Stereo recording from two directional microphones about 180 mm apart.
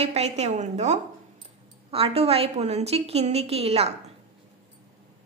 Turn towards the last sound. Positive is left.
turn(degrees=-35)  # may be behind; listen again after turning